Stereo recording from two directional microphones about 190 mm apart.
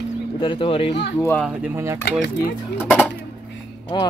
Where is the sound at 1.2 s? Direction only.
10° left (ahead or behind).